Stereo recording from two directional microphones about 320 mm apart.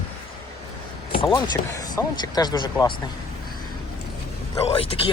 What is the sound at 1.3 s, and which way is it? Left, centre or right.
Speech, centre.